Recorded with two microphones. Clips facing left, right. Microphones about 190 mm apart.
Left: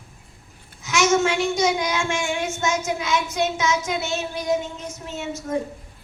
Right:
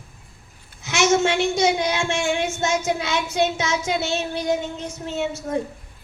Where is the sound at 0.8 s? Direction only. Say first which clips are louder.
Right 1 dB; 30° right (ahead or behind).